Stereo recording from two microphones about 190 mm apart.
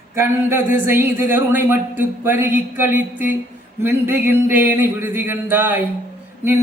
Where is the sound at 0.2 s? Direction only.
10° right (ahead or behind).